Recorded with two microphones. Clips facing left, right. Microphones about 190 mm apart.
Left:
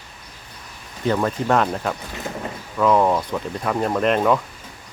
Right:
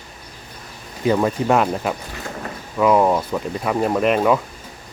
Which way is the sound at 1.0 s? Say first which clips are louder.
Right 3 dB; 10° right (ahead or behind).